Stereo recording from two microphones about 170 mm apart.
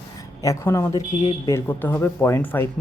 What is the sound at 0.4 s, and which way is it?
Speech, 15° left (ahead or behind).